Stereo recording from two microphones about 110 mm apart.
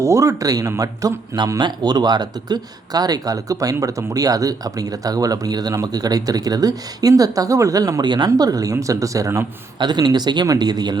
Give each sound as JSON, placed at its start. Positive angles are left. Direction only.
{"t": 0.0, "sound": "speech", "side_deg": -30}
{"t": 9.7, "sound": "speech", "side_deg": -40}